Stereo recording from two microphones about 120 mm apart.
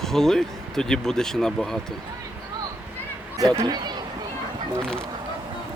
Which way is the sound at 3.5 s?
35° right (ahead or behind).